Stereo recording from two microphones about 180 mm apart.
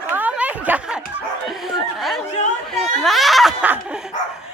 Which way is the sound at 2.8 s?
Centre (ahead or behind).